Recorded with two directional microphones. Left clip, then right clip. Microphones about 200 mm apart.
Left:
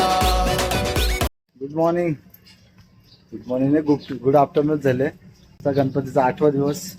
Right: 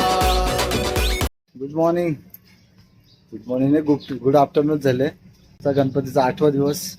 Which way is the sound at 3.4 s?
5° right (ahead or behind).